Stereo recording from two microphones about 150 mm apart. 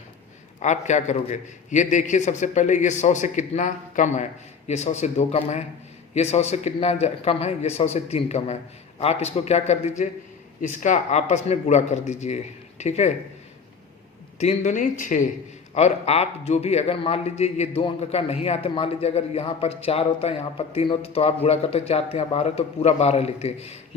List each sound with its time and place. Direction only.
0.6 s a man's voice: 50° left (ahead or behind)
14.3 s speech: 50° left (ahead or behind)
15.7 s a man's voice: 45° left (ahead or behind)